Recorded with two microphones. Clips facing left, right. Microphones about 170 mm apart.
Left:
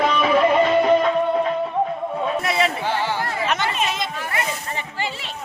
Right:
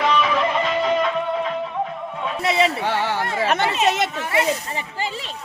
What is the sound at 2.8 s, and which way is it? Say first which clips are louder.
Speech: right 1 dB; 65° right (ahead or behind).